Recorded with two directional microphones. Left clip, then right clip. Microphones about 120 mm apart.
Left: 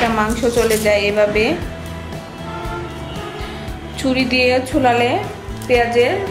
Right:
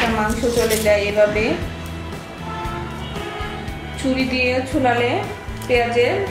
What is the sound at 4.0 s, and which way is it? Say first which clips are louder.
A woman's voice: left 4 dB; 40° left (ahead or behind).